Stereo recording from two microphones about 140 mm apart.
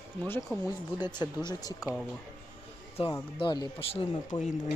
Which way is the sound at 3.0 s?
40° left (ahead or behind).